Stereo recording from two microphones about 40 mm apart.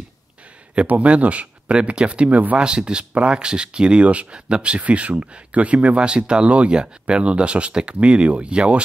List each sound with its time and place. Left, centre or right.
0.8 s speech: right
2.6 s speech: right